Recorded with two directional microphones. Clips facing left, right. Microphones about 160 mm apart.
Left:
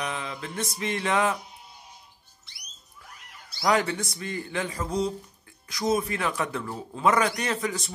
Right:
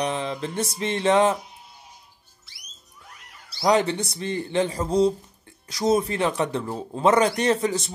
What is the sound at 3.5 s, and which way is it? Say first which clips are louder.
Speech: right 4 dB; 25° right (ahead or behind).